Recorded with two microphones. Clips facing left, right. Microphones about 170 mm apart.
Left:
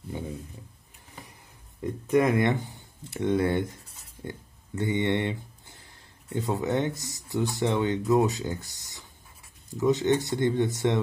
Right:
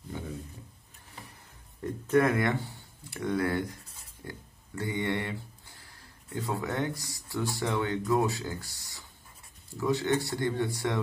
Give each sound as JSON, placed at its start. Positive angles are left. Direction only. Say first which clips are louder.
{"t": 1.8, "sound": "speech", "louder": "left 2 dB", "side_deg": 15}
{"t": 4.2, "sound": "a sound", "louder": "left 5 dB", "side_deg": 20}
{"t": 6.3, "sound": "speech", "louder": "left 5 dB", "side_deg": 20}